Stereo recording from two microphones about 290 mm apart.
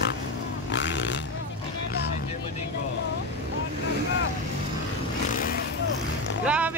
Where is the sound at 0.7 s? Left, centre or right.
Left.